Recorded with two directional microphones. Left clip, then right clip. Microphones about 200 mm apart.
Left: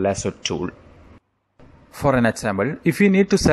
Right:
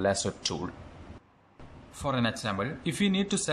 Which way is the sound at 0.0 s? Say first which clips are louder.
Left 6 dB; 15° left (ahead or behind).